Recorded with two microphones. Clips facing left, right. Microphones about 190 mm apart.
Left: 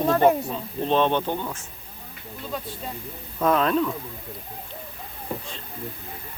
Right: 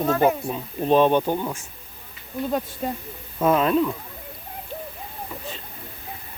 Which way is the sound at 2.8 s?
55° right (ahead or behind).